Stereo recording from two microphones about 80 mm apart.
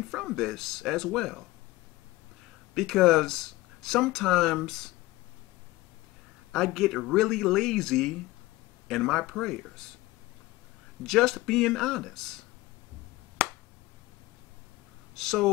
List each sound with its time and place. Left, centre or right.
0.1 s speech: centre
2.7 s speech: centre
6.5 s speech: centre
11.1 s speech: centre
13.4 s finger snapping: centre
15.1 s speech: centre